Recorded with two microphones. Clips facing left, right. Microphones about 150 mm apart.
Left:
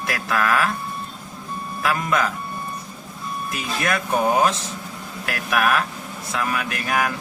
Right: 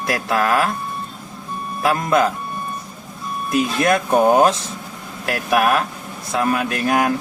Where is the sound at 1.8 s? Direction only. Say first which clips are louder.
Right 5 dB; 35° right (ahead or behind).